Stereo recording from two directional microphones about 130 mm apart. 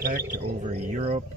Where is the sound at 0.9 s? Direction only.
60° right (ahead or behind).